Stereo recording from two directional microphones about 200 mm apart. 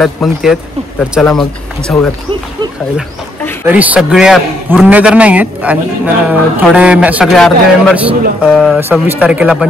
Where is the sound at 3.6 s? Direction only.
10° right (ahead or behind).